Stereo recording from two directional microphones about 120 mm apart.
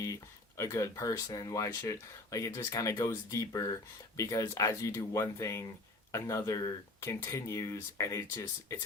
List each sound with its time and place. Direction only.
0.0 s speech: 25° left (ahead or behind)